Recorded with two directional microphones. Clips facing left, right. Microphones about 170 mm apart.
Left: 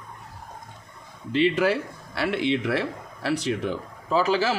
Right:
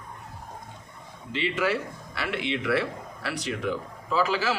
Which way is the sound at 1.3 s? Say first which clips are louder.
Left 6 dB; 40° left (ahead or behind).